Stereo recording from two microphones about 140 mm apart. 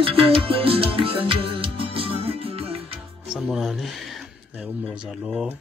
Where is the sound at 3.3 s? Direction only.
Centre (ahead or behind).